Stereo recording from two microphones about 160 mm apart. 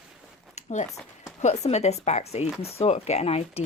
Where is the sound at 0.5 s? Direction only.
50° left (ahead or behind).